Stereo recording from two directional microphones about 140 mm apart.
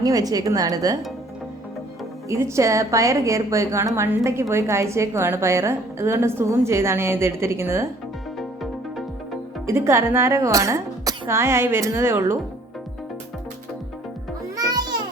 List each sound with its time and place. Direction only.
0.0 s a woman's voice: 25° right (ahead or behind)
2.3 s a woman's voice: 20° right (ahead or behind)
9.6 s a woman's voice: 20° right (ahead or behind)
14.5 s music: 25° right (ahead or behind)